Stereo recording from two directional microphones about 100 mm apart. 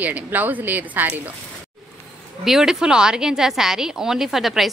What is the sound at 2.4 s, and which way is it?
Speech, 5° right (ahead or behind).